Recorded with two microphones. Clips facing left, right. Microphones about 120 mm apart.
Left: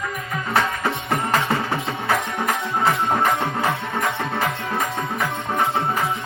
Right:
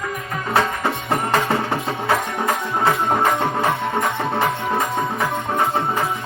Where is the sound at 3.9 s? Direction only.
25° right (ahead or behind).